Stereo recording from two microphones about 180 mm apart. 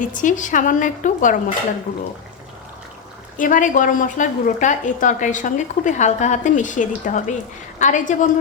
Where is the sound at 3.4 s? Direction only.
45° left (ahead or behind).